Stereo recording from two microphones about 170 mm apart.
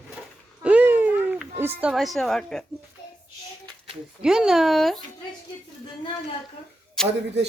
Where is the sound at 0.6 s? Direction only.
10° right (ahead or behind).